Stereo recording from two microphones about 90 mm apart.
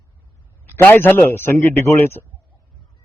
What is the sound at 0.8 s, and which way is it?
A man's voice, 25° left (ahead or behind).